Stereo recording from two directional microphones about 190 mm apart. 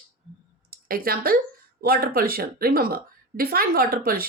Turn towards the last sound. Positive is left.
turn(degrees=-50)  # may be behind; listen again after turning